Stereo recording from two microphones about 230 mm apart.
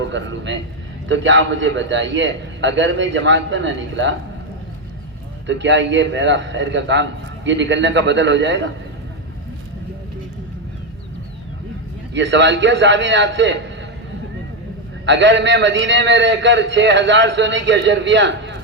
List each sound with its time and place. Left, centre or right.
0.0 s a man's voice: right
5.5 s a man's voice: right
12.1 s a man's voice: right
15.0 s a man's voice: right